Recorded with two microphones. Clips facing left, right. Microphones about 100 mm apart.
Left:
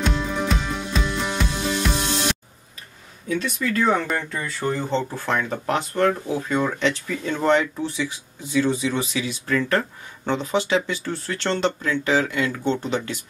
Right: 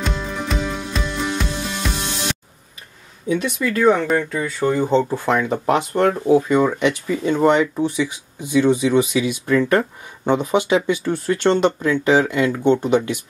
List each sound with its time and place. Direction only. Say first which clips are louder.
0.0 s music: left 1 dB; centre (ahead or behind)
3.3 s speech: right 4 dB; 15° right (ahead or behind)
4.8 s speech: right 7 dB; 15° right (ahead or behind)